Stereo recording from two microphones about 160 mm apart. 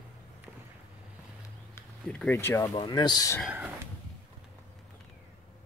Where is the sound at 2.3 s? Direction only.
15° left (ahead or behind).